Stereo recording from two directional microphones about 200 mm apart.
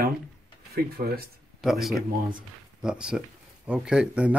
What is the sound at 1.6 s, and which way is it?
Speech, centre (ahead or behind).